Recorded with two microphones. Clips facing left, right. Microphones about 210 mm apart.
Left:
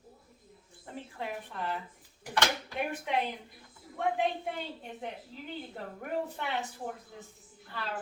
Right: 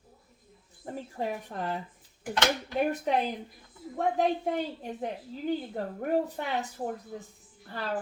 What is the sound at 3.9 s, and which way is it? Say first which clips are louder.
Speech: right 4 dB; 40° right (ahead or behind).